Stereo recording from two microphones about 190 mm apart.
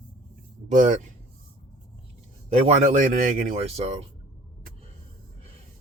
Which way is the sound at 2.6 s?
40° right (ahead or behind).